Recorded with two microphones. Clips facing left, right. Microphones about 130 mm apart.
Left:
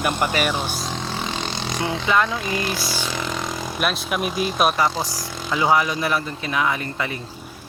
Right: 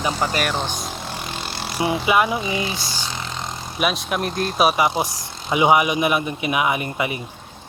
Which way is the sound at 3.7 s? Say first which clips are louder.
Right 3 dB; centre (ahead or behind).